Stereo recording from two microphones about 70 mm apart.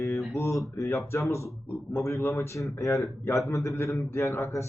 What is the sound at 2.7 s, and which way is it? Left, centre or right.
Speech, left.